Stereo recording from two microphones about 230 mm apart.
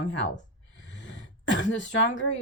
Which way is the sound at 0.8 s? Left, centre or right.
Left.